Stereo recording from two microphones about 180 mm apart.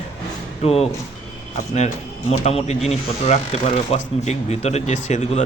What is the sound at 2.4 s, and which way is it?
Speech, 35° left (ahead or behind).